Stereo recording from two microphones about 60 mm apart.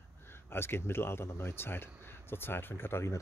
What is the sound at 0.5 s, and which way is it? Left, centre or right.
Speech, left.